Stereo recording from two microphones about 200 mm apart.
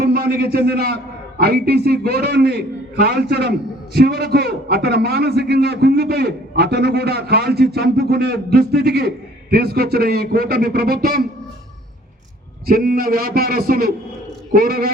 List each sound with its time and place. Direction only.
0.0 s a man's voice: 50° right (ahead or behind)
12.6 s a man's voice: 45° right (ahead or behind)